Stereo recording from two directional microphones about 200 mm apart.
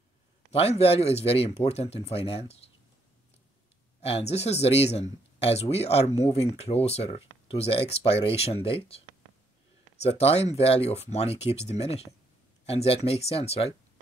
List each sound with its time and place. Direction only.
0.5 s speech: 30° left (ahead or behind)
4.0 s speech: 30° left (ahead or behind)
10.0 s speech: 30° left (ahead or behind)